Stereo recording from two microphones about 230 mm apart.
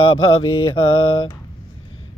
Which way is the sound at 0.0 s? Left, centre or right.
Left.